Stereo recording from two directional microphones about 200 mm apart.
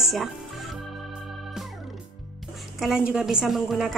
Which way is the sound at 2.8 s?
5° right (ahead or behind).